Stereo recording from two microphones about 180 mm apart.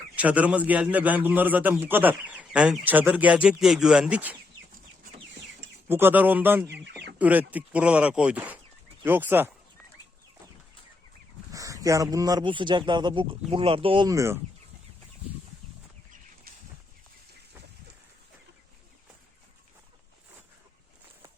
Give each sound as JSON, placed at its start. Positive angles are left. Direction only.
{"t": 0.2, "sound": "a man's voice", "side_deg": -10}
{"t": 5.9, "sound": "a man's voice", "side_deg": -10}
{"t": 11.5, "sound": "a sound", "side_deg": -20}
{"t": 12.1, "sound": "speech", "side_deg": -20}